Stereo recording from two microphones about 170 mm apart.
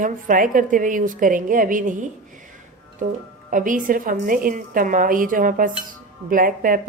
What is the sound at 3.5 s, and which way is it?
Speech, 50° right (ahead or behind).